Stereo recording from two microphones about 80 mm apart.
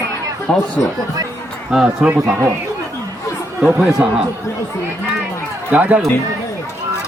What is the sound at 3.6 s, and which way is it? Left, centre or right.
Speech, centre.